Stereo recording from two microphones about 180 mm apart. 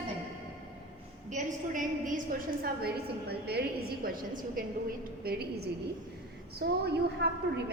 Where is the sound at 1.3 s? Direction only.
45° right (ahead or behind).